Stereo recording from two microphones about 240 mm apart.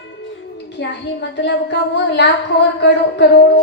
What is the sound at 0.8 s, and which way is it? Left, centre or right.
A woman's voice, left.